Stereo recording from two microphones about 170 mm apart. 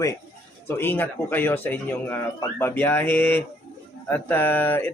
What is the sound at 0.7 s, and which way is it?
Speech, 10° left (ahead or behind).